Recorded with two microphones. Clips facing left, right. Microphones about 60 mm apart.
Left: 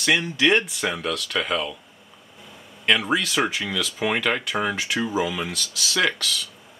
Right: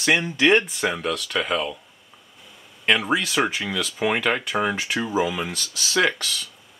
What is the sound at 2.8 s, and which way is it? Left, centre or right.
Speech, centre.